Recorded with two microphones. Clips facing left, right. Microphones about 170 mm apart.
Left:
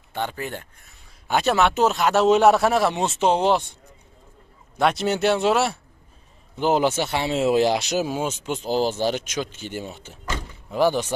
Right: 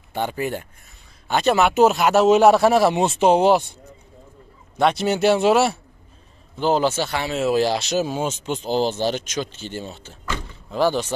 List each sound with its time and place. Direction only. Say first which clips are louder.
0.1 s a man's voice: right 4 dB; 10° right (ahead or behind)
1.2 s a man's voice: right 2 dB; 5° left (ahead or behind)
4.7 s speech: right 2 dB; centre (ahead or behind)
6.6 s speech: right 1 dB; 15° left (ahead or behind)
10.3 s door: even; 15° left (ahead or behind)